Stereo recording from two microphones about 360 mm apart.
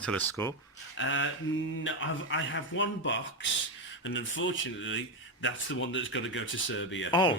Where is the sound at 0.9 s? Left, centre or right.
Left.